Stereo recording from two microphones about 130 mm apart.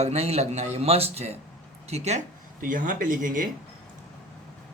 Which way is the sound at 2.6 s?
90° right.